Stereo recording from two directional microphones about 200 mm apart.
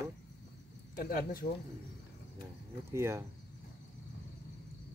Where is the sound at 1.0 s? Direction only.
45° left (ahead or behind).